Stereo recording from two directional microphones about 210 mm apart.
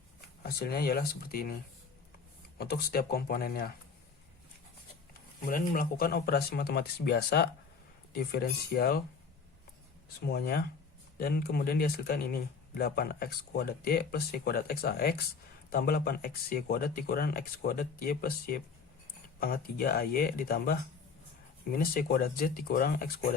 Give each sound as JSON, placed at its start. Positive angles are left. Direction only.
{"t": 0.4, "sound": "speech", "side_deg": 50}
{"t": 2.6, "sound": "speech", "side_deg": 50}
{"t": 5.5, "sound": "speech", "side_deg": 40}
{"t": 10.2, "sound": "speech", "side_deg": 50}